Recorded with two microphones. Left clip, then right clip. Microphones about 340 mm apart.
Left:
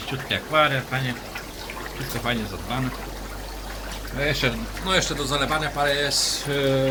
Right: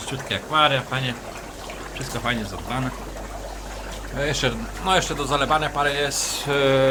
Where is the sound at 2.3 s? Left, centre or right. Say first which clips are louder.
Right 1 dB; centre.